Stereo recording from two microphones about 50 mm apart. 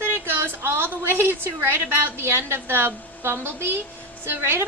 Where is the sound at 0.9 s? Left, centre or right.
Right.